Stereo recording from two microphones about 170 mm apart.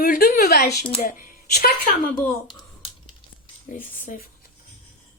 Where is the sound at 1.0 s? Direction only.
55° left (ahead or behind).